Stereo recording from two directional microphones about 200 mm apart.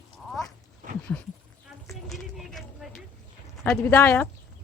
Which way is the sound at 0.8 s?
40° right (ahead or behind).